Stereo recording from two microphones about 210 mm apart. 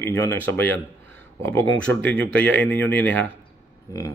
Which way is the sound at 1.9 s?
75° right (ahead or behind).